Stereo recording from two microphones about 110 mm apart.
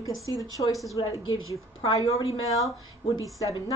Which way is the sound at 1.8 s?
65° left (ahead or behind).